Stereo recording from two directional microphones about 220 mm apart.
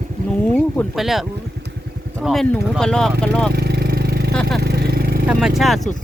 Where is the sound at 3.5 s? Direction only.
45° right (ahead or behind).